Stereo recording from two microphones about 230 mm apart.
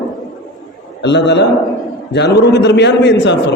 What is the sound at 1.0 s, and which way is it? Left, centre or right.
A man's voice, left.